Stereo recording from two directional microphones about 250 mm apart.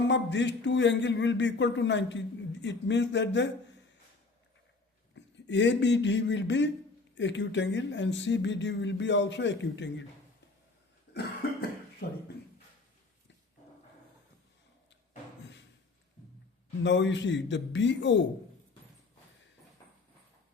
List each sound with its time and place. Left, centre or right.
0.1 s speech: left
5.1 s speech: left
11.1 s cough: left
12.0 s beatboxing: left
16.8 s speech: left